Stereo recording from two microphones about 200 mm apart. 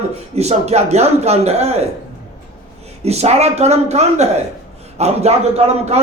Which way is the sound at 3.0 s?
30° right (ahead or behind).